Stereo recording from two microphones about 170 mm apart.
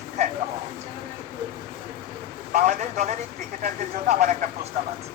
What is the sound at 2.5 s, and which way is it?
Speech, 45° right (ahead or behind).